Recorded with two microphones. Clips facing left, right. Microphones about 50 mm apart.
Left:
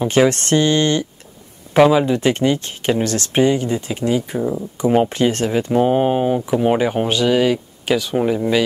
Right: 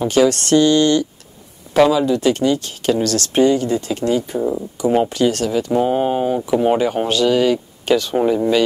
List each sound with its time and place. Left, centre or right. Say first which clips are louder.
0.1 s speech: right 2 dB; left
4.4 s speech: right 1 dB; centre
5.1 s speech: even; left
5.7 s speech: left 2 dB; centre